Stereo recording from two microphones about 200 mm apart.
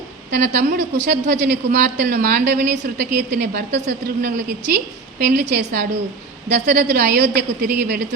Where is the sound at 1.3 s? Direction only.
50° right (ahead or behind).